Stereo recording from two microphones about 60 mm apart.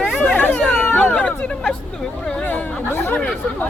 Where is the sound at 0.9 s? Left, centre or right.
Left.